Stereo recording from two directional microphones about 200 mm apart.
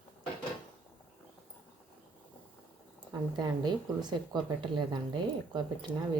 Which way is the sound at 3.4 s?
20° right (ahead or behind).